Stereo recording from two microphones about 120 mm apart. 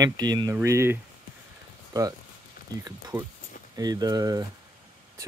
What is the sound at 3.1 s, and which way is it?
Speech, 40° right (ahead or behind).